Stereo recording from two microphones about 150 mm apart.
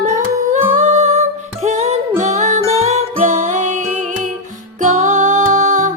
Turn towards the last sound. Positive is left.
turn(degrees=-55)  # may be behind; listen again after turning